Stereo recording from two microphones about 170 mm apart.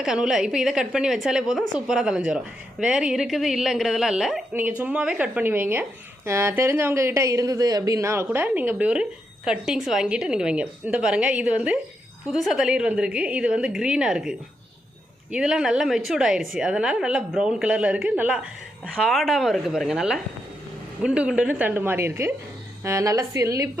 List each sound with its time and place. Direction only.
0.0 s a woman's voice: 5° right (ahead or behind); by 23.6 s 20° right (ahead or behind)